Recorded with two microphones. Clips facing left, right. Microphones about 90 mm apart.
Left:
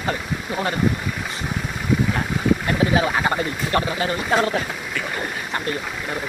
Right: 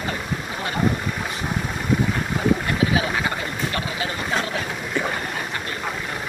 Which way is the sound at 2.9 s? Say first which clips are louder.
Left 3 dB; 40° left (ahead or behind).